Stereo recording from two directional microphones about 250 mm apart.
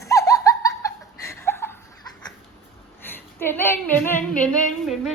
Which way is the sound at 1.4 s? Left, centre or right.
Centre.